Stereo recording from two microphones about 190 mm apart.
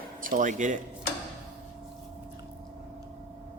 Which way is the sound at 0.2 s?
45° right (ahead or behind).